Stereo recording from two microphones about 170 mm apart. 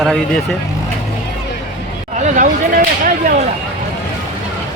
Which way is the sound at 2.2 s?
50° right (ahead or behind).